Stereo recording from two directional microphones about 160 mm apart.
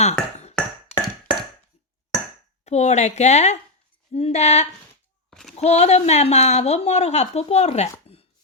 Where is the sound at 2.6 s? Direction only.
45° left (ahead or behind).